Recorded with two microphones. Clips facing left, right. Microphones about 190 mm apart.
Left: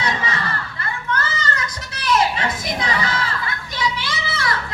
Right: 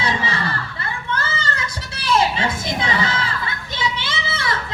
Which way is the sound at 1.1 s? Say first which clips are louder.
Left 1 dB; 25° right (ahead or behind).